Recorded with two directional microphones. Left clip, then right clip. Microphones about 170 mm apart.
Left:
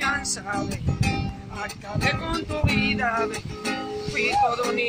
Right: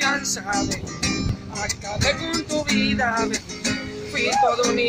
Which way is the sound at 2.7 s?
10° left (ahead or behind).